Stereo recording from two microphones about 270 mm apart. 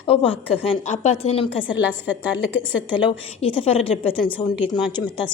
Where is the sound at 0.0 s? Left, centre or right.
Centre.